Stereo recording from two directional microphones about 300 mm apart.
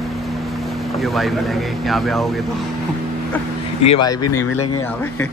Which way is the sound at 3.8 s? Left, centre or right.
Centre.